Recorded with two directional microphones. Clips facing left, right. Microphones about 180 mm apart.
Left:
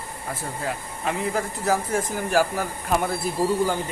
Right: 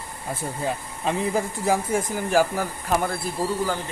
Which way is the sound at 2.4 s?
5° left (ahead or behind).